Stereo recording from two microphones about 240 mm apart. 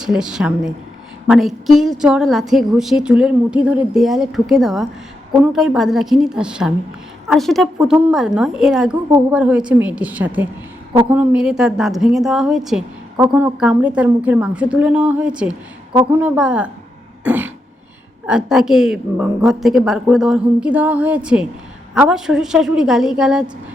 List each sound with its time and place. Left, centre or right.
0.0 s a woman's voice: centre
17.2 s cough: centre
18.3 s a woman's voice: centre